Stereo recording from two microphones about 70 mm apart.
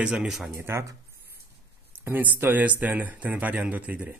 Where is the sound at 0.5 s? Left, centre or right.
Right.